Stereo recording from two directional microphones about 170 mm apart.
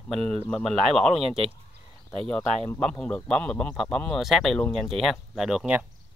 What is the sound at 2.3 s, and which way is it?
Speech, 5° left (ahead or behind).